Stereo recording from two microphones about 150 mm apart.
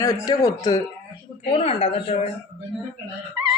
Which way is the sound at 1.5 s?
40° left (ahead or behind).